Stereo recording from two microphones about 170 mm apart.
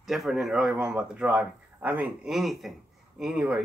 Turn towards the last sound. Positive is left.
turn(degrees=-5)  # may be behind; listen again after turning